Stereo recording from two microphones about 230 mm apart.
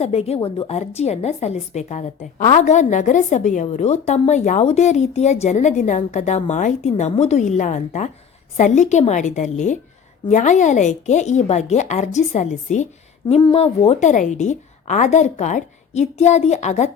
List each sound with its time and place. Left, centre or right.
0.0 s a woman's voice: left